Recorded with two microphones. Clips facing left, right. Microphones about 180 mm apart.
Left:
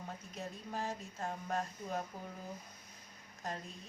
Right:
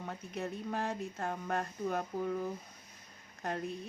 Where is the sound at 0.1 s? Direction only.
65° right (ahead or behind).